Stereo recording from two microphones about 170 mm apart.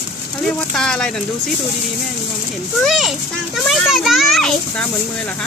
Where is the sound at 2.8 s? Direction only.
Centre (ahead or behind).